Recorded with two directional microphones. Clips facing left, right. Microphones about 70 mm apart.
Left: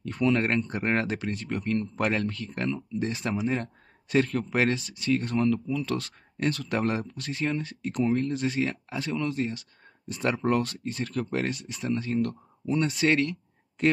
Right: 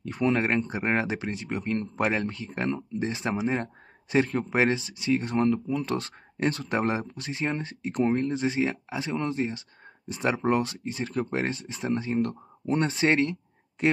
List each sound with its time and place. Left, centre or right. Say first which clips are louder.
0.3 s speech: even; centre